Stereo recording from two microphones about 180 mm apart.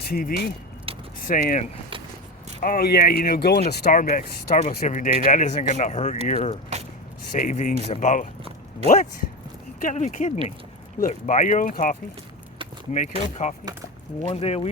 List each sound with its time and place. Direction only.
0.0 s speech: 55° left (ahead or behind)
0.9 s keys jangling: 30° right (ahead or behind)
1.3 s speech: 50° left (ahead or behind)
9.8 s speech: 45° left (ahead or behind)